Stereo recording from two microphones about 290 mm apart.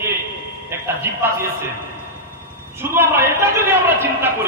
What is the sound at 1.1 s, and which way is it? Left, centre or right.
Speech, centre.